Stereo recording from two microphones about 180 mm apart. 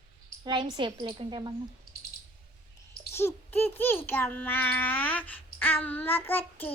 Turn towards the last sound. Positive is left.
turn(degrees=10)  # may be behind; listen again after turning